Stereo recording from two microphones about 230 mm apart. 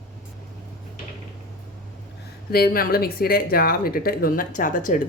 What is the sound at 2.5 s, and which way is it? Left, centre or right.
Speech, left.